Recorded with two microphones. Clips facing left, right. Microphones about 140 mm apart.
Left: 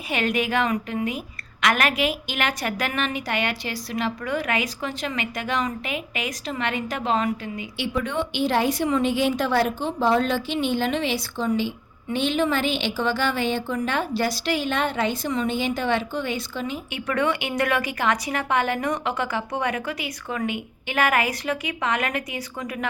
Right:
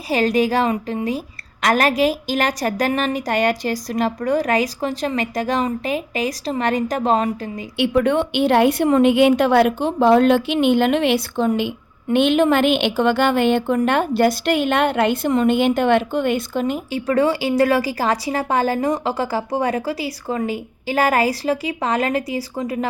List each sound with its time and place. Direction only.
0.1 s a woman's voice: 35° right (ahead or behind)
7.8 s a woman's voice: 60° right (ahead or behind)
16.9 s a woman's voice: 30° right (ahead or behind)